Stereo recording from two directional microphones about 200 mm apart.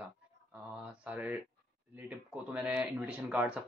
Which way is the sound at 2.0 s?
5° right (ahead or behind).